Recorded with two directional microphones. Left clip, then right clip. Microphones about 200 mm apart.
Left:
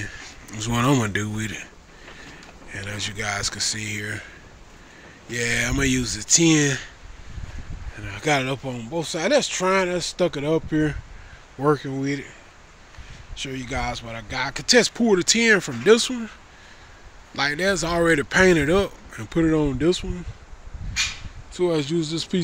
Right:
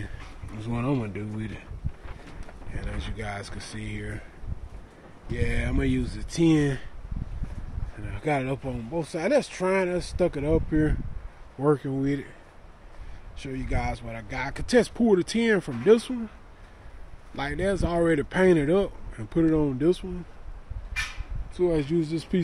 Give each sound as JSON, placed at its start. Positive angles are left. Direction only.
{"t": 0.6, "sound": "speech", "side_deg": 10}
{"t": 1.4, "sound": "speech", "side_deg": 5}
{"t": 2.7, "sound": "speech", "side_deg": 0}
{"t": 5.3, "sound": "speech", "side_deg": 0}
{"t": 8.0, "sound": "speech", "side_deg": 5}
{"t": 11.6, "sound": "speech", "side_deg": -10}
{"t": 13.4, "sound": "speech", "side_deg": 5}
{"t": 17.4, "sound": "speech", "side_deg": -5}
{"t": 21.5, "sound": "speech", "side_deg": 0}